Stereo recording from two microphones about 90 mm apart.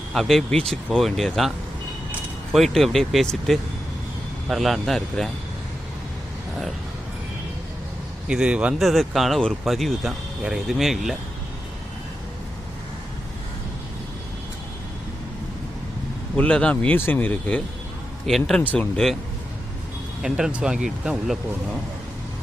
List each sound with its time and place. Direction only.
0.1 s speech: 5° left (ahead or behind)
8.3 s speech: 10° right (ahead or behind)
8.8 s speech: centre (ahead or behind)
16.3 s speech: 15° left (ahead or behind)
18.3 s speech: centre (ahead or behind)
18.6 s speech: 15° left (ahead or behind)
20.2 s speech: 5° right (ahead or behind)